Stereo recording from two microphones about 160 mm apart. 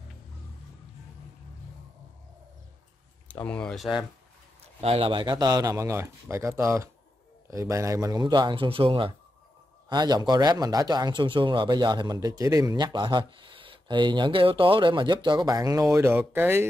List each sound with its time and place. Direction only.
3.3 s speech: 10° left (ahead or behind)
4.7 s speech: 35° right (ahead or behind); by 16.6 s 15° right (ahead or behind)